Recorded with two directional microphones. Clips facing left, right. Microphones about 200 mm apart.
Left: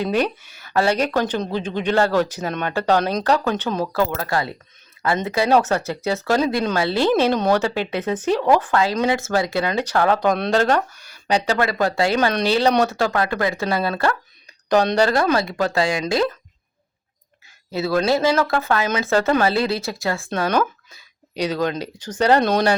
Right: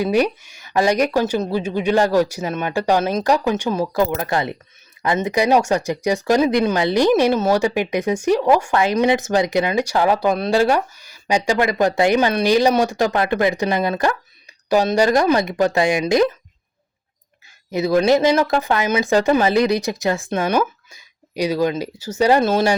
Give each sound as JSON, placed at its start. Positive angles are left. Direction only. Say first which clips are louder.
{"t": 0.0, "sound": "speech", "louder": "right 3 dB", "side_deg": -10}
{"t": 17.7, "sound": "speech", "louder": "right 4 dB", "side_deg": -15}